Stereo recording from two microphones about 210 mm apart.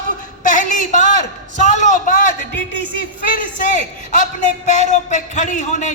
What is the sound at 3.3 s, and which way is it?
Speech, 40° left (ahead or behind).